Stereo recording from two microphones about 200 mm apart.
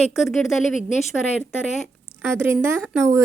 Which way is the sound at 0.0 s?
Centre (ahead or behind).